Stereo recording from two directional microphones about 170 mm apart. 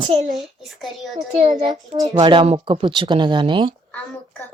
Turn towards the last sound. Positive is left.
turn(degrees=-30)  # may be behind; listen again after turning